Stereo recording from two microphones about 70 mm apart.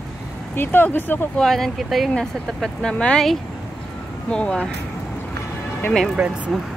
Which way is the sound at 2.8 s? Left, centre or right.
Centre.